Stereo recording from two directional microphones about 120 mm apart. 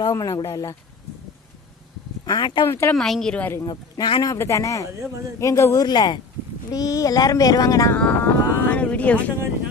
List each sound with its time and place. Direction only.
0.0 s speech: 30° left (ahead or behind)
2.2 s speech: 35° left (ahead or behind)
2.7 s speech: 20° left (ahead or behind)
3.0 s a woman's voice: 5° left (ahead or behind)
3.6 s speech: 35° left (ahead or behind)
7.9 s a sound: 15° left (ahead or behind)